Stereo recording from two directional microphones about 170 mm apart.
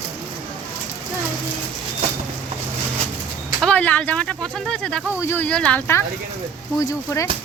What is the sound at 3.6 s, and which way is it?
Speech, 5° left (ahead or behind).